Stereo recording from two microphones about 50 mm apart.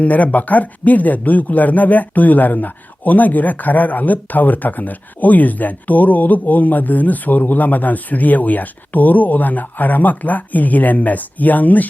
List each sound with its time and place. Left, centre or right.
0.0 s speech: left